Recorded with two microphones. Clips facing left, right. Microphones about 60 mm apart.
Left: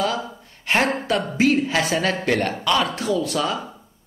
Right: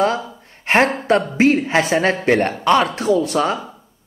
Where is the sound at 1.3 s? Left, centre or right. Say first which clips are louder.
Right 4 dB; right.